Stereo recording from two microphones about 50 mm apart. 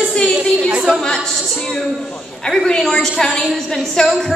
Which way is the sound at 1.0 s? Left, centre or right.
Centre.